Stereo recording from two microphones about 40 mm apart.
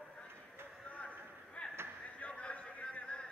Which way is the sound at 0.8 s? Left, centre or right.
Left.